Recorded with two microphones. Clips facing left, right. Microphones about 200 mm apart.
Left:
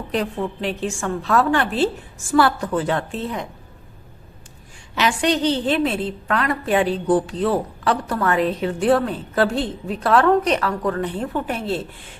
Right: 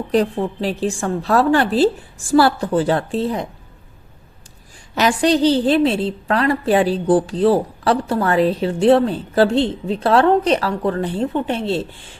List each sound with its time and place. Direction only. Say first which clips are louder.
0.1 s a woman's voice: right 6 dB; 35° right (ahead or behind)
4.9 s a woman's voice: right 4 dB; 35° right (ahead or behind)